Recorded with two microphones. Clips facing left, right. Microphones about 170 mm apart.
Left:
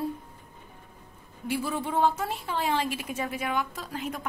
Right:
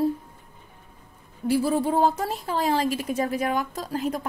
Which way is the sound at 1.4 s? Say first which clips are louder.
Right 8 dB; 35° right (ahead or behind).